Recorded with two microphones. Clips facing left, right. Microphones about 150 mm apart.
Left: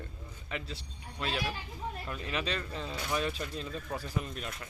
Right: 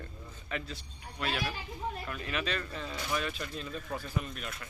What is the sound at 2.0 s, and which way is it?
Speech, 30° left (ahead or behind).